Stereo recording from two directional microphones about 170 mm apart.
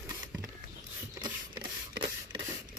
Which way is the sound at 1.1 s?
25° right (ahead or behind).